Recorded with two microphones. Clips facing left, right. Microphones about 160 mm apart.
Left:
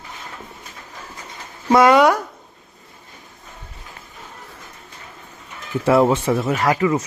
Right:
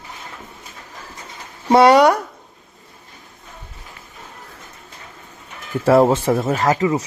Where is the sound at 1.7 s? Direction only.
35° right (ahead or behind).